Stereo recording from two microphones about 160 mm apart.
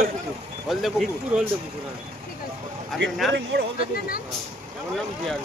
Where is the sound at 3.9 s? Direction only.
65° left (ahead or behind).